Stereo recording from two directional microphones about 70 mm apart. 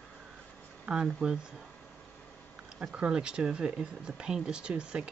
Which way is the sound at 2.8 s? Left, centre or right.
Centre.